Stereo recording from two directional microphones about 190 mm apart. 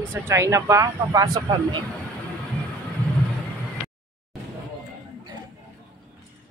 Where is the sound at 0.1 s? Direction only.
15° right (ahead or behind).